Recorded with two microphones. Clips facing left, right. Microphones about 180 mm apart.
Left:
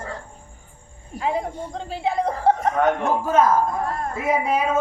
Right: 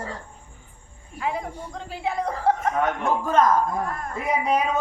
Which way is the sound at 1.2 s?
25° left (ahead or behind).